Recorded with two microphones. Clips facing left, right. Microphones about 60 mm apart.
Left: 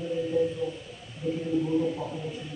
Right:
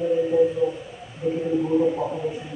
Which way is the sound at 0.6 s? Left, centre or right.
Centre.